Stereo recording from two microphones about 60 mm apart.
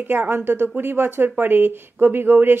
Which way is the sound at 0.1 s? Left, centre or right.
Right.